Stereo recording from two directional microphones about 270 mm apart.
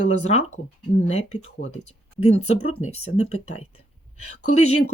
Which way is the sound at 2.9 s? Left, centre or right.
Left.